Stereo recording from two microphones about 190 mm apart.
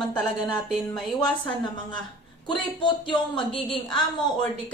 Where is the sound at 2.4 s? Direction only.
25° left (ahead or behind).